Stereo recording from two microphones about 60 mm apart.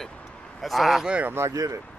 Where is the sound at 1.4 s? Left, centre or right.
Right.